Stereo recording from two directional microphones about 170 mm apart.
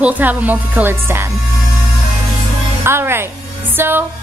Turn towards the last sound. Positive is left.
turn(degrees=-10)  # may be behind; listen again after turning